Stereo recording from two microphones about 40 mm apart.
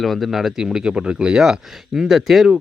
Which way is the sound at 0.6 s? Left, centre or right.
Right.